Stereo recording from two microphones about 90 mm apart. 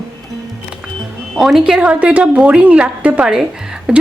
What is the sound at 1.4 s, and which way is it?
A woman's voice, 5° right (ahead or behind).